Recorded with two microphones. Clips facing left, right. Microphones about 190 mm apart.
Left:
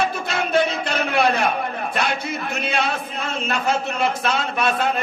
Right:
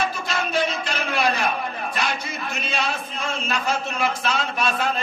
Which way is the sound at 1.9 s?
60° left (ahead or behind).